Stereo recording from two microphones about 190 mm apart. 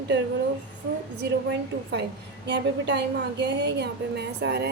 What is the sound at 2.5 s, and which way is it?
A woman's voice, 65° right (ahead or behind).